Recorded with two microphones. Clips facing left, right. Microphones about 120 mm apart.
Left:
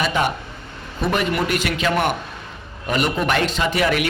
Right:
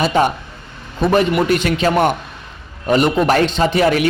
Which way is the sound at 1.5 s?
35° right (ahead or behind).